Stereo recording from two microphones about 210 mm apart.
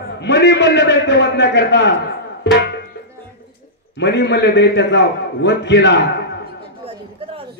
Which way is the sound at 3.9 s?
55° left (ahead or behind).